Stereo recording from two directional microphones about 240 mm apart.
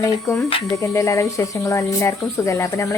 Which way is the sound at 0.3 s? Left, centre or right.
Centre.